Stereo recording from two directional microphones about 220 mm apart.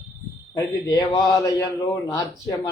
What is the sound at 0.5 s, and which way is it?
Speech, 15° left (ahead or behind).